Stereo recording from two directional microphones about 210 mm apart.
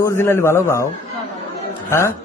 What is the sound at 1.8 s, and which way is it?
Speech, 15° left (ahead or behind).